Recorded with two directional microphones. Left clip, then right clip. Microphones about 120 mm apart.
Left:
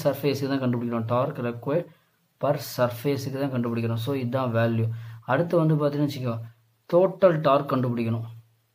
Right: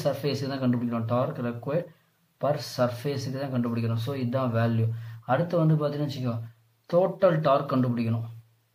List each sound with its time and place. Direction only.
0.0 s speech: 45° left (ahead or behind)
6.9 s speech: 45° left (ahead or behind)